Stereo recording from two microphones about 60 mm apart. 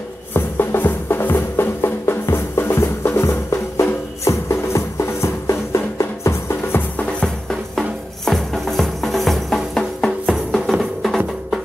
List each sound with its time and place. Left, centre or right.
0.3 s music: left
6.7 s music: left
7.1 s music: centre